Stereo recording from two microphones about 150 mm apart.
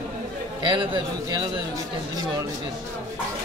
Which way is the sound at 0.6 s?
35° right (ahead or behind).